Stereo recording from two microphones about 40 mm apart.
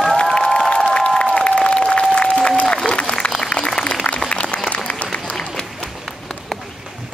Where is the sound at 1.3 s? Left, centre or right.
Left.